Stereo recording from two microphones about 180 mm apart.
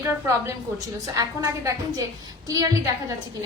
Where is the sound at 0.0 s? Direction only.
15° right (ahead or behind).